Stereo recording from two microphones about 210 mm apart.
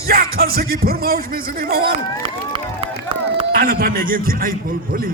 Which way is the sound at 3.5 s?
45° right (ahead or behind).